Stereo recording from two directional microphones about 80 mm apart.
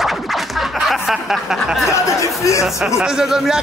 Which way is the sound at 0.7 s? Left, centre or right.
Centre.